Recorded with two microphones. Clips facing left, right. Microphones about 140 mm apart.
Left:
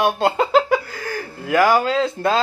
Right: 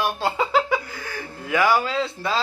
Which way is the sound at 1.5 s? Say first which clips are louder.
Left 4 dB; 45° left (ahead or behind).